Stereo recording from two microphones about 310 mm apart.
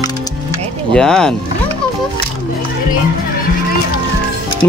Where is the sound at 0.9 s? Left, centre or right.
Centre.